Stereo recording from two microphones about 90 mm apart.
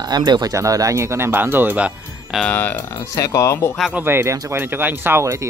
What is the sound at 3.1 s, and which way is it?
Speech, 35° left (ahead or behind).